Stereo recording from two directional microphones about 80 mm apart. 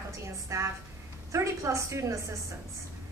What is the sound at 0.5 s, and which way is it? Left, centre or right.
A woman's voice, right.